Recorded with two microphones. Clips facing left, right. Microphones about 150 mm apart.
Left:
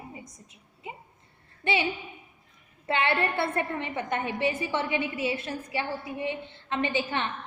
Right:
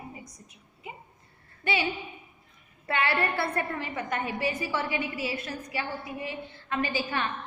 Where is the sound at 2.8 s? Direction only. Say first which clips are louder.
Left 1 dB; 25° left (ahead or behind).